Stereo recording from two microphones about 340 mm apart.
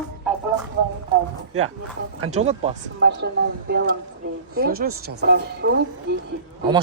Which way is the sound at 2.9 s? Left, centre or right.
Right.